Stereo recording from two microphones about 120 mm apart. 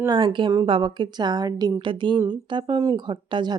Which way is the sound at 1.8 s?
45° right (ahead or behind).